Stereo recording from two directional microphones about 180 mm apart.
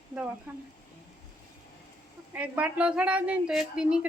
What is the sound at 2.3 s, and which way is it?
A woman's voice, 10° right (ahead or behind).